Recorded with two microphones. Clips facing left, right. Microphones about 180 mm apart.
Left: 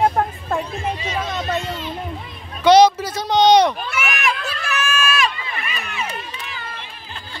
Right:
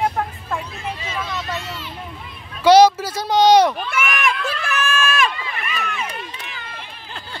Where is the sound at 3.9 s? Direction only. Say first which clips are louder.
Right 1 dB; 50° right (ahead or behind).